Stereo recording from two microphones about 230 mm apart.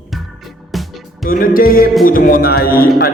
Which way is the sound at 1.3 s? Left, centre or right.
Left.